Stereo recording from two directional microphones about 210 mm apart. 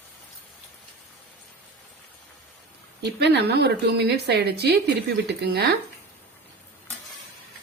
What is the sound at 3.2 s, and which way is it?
A woman's voice, 55° right (ahead or behind).